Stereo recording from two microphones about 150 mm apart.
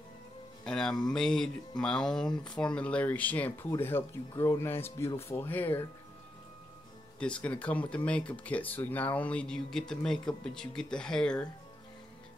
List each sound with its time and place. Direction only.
0.7 s music: 5° left (ahead or behind)
1.0 s speech: 5° left (ahead or behind)
7.2 s speech: 5° left (ahead or behind)